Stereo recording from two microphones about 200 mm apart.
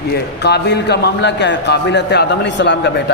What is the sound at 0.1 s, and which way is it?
A man's voice, 55° left (ahead or behind).